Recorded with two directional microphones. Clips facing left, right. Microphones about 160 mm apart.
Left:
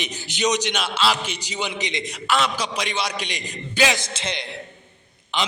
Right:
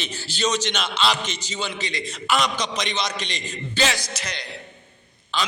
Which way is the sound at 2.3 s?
5° left (ahead or behind).